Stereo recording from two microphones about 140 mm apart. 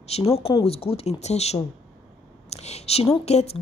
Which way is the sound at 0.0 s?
50° left (ahead or behind).